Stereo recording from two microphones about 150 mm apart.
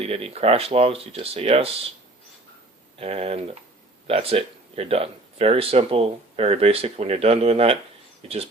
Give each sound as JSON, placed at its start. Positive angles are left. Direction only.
{"t": 0.0, "sound": "speech", "side_deg": -40}
{"t": 3.0, "sound": "speech", "side_deg": -40}